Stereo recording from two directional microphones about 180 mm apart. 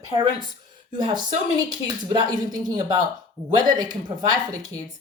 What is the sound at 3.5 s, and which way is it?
Speech, 25° right (ahead or behind).